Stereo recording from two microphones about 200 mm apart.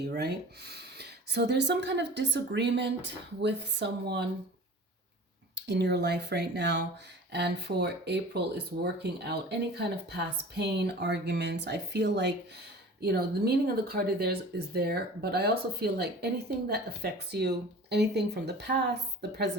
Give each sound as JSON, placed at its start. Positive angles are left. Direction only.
{"t": 0.0, "sound": "speech", "side_deg": -55}
{"t": 5.5, "sound": "speech", "side_deg": -60}